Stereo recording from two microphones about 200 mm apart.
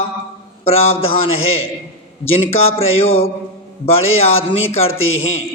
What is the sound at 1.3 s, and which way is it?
Speech, 90° left.